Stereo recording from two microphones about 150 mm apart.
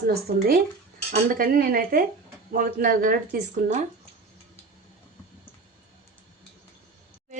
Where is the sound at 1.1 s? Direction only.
75° right (ahead or behind).